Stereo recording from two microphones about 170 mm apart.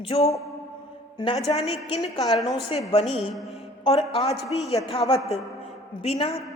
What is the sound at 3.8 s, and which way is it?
Speech, 35° left (ahead or behind).